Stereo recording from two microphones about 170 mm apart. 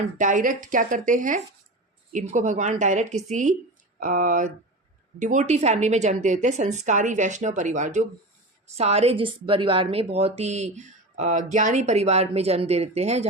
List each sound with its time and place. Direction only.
0.2 s a woman's voice: 50° right (ahead or behind)